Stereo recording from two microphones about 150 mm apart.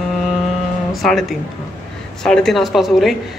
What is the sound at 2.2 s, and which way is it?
Speech, 5° left (ahead or behind).